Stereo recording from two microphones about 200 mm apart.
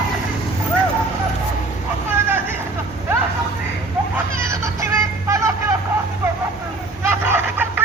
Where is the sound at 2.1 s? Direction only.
10° right (ahead or behind).